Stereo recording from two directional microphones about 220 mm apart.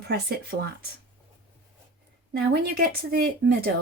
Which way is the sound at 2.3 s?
45° right (ahead or behind).